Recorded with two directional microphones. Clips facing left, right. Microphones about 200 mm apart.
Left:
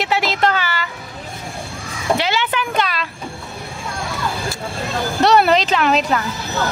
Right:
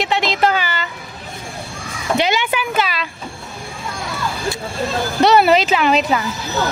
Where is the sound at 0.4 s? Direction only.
10° right (ahead or behind).